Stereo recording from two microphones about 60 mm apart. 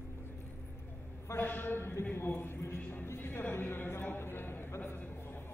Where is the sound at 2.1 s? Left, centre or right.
Left.